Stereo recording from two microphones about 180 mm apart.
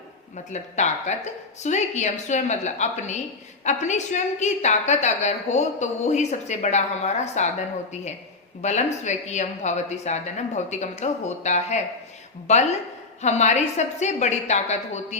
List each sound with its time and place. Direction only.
0.5 s a woman's voice: 40° left (ahead or behind)
8.6 s a woman's voice: 40° left (ahead or behind)